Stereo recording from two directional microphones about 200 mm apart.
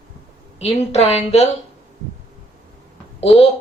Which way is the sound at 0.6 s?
30° left (ahead or behind).